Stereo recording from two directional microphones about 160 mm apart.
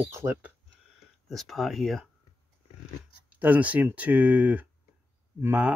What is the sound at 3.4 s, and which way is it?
Speech, 10° right (ahead or behind).